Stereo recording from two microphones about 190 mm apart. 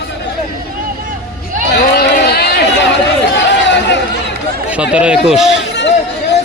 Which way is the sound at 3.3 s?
65° left (ahead or behind).